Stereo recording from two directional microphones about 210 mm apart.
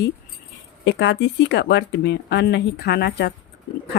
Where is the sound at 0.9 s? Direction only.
55° left (ahead or behind).